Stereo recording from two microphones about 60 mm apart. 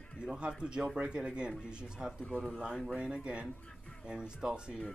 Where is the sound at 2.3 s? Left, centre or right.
Left.